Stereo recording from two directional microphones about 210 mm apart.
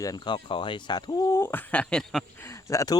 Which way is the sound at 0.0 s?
20° left (ahead or behind).